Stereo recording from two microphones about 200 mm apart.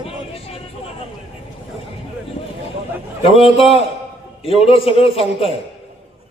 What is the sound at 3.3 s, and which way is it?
A man's voice, 30° left (ahead or behind).